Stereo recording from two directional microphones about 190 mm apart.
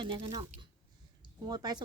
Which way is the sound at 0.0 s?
25° right (ahead or behind).